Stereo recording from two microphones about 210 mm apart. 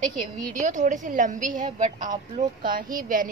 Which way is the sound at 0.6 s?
35° right (ahead or behind).